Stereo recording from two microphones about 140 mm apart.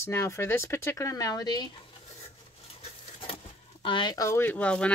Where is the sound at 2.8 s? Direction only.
40° left (ahead or behind).